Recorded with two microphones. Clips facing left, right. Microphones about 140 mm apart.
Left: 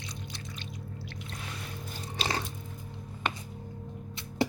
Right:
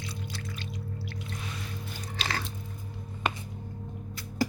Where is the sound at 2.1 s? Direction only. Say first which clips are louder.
Left 2 dB; 25° left (ahead or behind).